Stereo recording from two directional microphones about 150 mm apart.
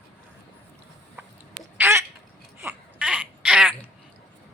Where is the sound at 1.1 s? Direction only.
10° right (ahead or behind).